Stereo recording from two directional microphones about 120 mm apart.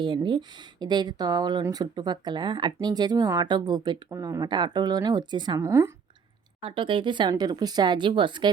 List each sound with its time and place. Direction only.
0.0 s speech: 40° right (ahead or behind)
5.5 s a woman's voice: 25° right (ahead or behind)
6.6 s speech: 45° right (ahead or behind)